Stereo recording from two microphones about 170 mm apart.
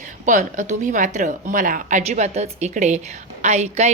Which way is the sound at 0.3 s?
45° right (ahead or behind).